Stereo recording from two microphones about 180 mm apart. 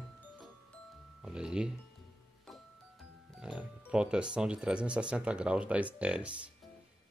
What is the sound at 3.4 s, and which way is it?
Speech, 5° right (ahead or behind).